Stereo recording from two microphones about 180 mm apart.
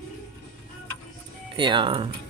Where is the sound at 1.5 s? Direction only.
25° right (ahead or behind).